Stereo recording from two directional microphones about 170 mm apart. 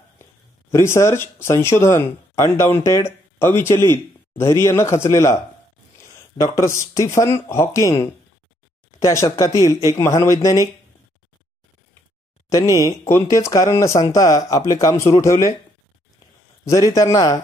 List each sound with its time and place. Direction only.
0.2 s a man's voice: 15° left (ahead or behind)
12.4 s speech: 20° left (ahead or behind)
16.6 s speech: 20° left (ahead or behind)